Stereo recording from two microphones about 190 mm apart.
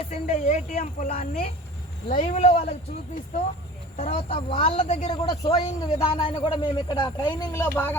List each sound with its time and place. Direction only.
0.1 s speech: 35° left (ahead or behind)
3.9 s speech: 30° left (ahead or behind)
5.2 s speech: 20° left (ahead or behind)
5.9 s speech: 30° left (ahead or behind); by 7.9 s 10° left (ahead or behind)